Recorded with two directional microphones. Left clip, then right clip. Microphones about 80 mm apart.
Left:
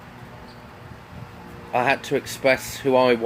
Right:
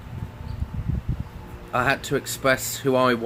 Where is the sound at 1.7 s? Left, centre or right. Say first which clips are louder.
Left 2 dB; right.